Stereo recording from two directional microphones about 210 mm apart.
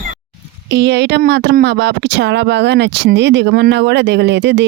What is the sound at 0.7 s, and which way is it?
Speech, 55° right (ahead or behind).